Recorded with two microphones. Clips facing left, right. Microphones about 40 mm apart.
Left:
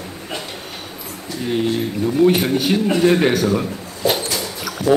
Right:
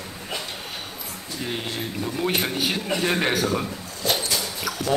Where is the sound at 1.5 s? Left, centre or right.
Centre.